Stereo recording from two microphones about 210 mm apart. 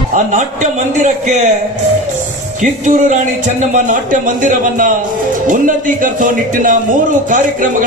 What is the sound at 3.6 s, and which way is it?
Speech, 40° right (ahead or behind).